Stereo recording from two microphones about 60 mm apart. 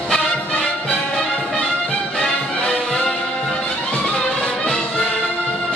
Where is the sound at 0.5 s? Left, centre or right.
Centre.